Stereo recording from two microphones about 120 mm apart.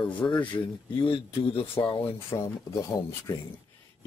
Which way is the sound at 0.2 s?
30° left (ahead or behind).